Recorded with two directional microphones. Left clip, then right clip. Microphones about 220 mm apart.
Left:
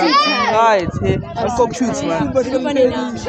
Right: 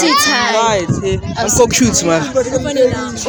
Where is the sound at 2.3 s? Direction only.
15° left (ahead or behind).